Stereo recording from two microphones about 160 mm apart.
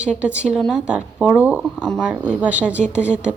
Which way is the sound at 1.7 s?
5° left (ahead or behind).